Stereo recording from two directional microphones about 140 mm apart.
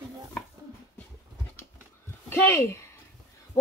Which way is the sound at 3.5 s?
20° left (ahead or behind).